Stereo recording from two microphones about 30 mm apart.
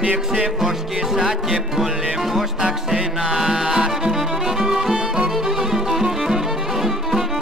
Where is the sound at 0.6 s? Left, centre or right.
Centre.